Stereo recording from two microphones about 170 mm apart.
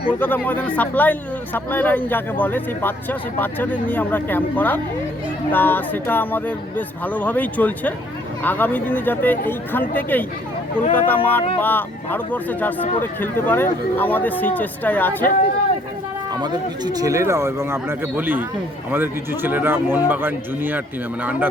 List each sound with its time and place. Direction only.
0.1 s speech: 10° left (ahead or behind)
16.3 s speech: 25° right (ahead or behind)